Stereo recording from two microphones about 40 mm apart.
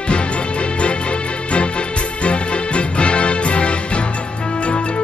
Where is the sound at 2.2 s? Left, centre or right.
Left.